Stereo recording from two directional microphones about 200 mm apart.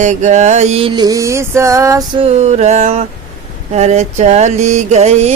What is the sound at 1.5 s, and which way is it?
Music, 15° right (ahead or behind).